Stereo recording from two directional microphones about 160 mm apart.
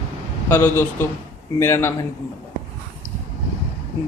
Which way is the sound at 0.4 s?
15° left (ahead or behind).